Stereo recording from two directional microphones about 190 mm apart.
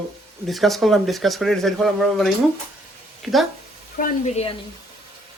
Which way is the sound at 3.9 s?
45° left (ahead or behind).